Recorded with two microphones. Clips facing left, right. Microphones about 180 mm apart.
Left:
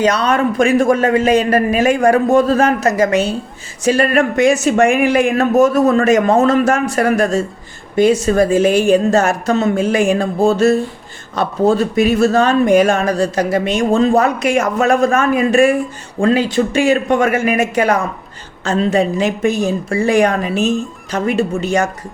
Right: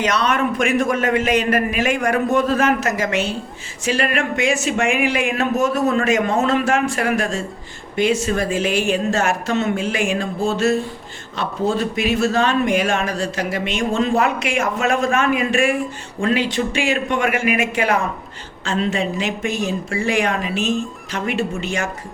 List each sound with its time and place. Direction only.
0.0 s speech: 35° left (ahead or behind)
11.3 s speech: 45° left (ahead or behind)